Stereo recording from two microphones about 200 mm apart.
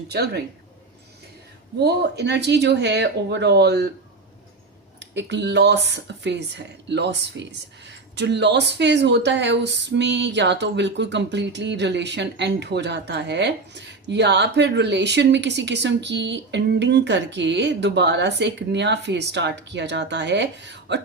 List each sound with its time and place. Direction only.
1.8 s speech: 55° right (ahead or behind)
4.9 s speech: 60° right (ahead or behind)